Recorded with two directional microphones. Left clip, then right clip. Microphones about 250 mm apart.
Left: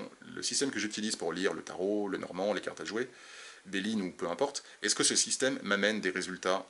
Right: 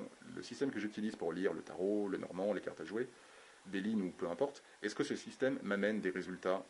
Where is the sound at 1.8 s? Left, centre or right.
Right.